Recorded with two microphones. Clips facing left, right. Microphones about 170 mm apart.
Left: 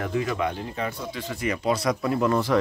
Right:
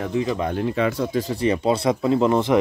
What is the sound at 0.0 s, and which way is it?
Speech, 20° right (ahead or behind).